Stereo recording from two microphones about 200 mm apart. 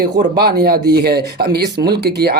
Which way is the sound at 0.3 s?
50° right (ahead or behind).